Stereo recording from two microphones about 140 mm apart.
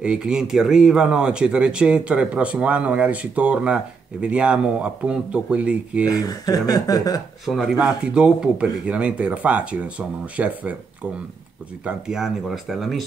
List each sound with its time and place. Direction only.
0.0 s speech: 5° right (ahead or behind)
6.0 s speech: 25° left (ahead or behind)
7.4 s speech: 5° right (ahead or behind)
11.8 s speech: 5° right (ahead or behind)